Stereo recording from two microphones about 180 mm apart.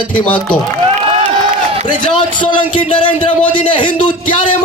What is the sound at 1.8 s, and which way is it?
A man's voice, 25° left (ahead or behind).